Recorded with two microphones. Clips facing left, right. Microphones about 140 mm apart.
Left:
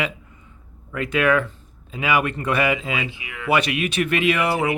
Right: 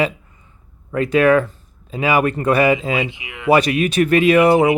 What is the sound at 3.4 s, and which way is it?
Speech, 40° right (ahead or behind).